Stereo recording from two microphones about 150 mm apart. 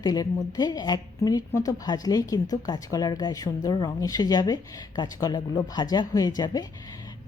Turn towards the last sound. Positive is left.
turn(degrees=25)  # may be behind; listen again after turning